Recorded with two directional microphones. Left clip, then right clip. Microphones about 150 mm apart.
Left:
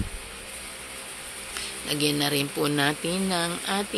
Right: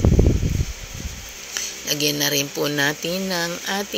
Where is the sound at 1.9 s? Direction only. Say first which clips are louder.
Right 4 dB; 20° right (ahead or behind).